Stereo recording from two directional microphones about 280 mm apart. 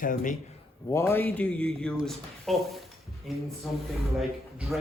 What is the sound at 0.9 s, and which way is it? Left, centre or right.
Speech, centre.